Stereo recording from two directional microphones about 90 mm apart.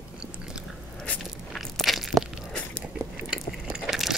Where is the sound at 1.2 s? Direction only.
Centre (ahead or behind).